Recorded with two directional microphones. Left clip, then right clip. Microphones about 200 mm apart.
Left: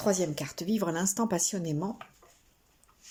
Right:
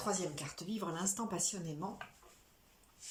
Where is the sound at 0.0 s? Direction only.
45° left (ahead or behind).